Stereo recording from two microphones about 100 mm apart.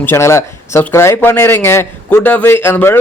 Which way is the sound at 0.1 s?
25° left (ahead or behind).